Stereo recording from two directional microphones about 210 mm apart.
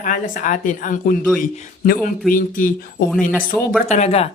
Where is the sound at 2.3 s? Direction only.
40° left (ahead or behind).